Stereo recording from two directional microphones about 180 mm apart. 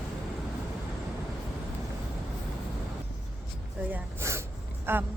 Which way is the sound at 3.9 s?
15° right (ahead or behind).